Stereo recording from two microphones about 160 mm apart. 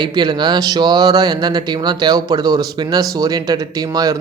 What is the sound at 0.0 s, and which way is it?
Speech, 30° right (ahead or behind).